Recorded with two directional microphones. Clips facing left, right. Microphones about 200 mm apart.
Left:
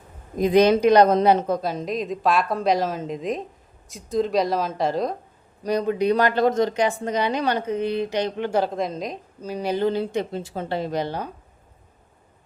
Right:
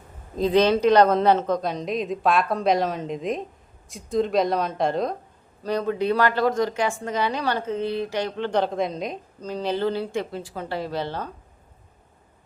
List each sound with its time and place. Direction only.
0.3 s speech: 15° left (ahead or behind)
5.6 s speech: 15° left (ahead or behind)